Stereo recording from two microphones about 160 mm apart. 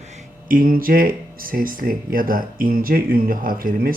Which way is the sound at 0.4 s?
60° right (ahead or behind).